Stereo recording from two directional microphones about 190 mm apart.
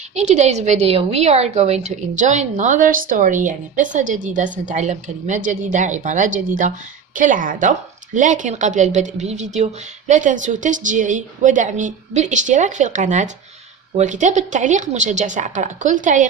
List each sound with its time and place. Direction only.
0.1 s a woman's voice: 35° right (ahead or behind)